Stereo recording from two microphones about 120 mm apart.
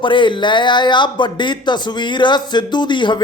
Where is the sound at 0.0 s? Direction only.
45° left (ahead or behind).